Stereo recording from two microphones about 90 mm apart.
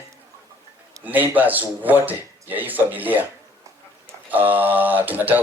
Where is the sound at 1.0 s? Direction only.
20° right (ahead or behind).